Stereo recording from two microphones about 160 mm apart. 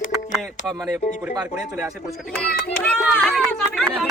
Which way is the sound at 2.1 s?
5° left (ahead or behind).